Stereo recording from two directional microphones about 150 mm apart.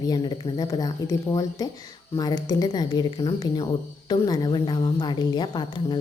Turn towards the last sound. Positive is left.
turn(degrees=30)  # may be behind; listen again after turning